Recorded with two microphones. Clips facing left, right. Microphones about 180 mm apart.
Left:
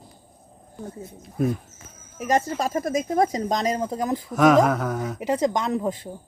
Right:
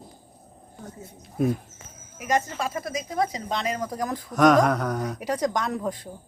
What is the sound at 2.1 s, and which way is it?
Speech, 35° left (ahead or behind).